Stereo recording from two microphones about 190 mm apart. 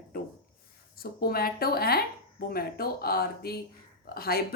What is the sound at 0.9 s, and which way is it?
A woman's voice, 50° left (ahead or behind).